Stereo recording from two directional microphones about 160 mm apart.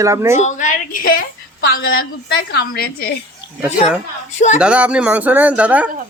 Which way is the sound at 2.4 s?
85° left.